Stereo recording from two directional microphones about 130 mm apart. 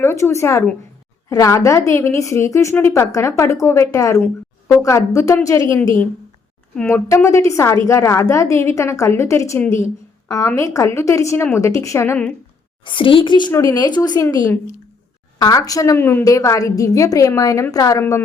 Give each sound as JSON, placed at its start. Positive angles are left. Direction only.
{"t": 0.0, "sound": "a woman's voice", "side_deg": 20}
{"t": 6.9, "sound": "a woman's voice", "side_deg": 20}
{"t": 12.8, "sound": "a woman's voice", "side_deg": 40}
{"t": 15.4, "sound": "a woman's voice", "side_deg": 30}